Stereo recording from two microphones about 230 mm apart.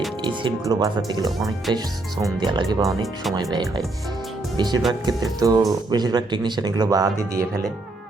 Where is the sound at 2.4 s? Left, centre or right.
Centre.